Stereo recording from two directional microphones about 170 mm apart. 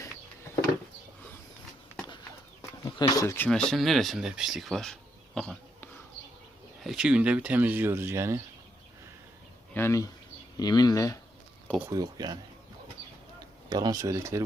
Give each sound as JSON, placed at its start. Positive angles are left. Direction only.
{"t": 2.8, "sound": "speech", "side_deg": 20}
{"t": 9.7, "sound": "speech", "side_deg": 15}
{"t": 11.9, "sound": "speech", "side_deg": -20}
{"t": 13.7, "sound": "speech", "side_deg": -25}